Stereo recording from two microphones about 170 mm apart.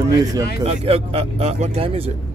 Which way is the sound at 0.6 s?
35° right (ahead or behind).